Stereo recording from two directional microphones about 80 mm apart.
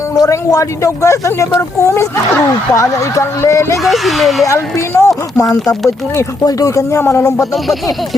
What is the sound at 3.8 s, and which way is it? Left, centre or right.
Speech, centre.